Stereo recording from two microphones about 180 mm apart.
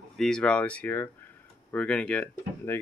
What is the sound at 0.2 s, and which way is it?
Speech, 5° left (ahead or behind).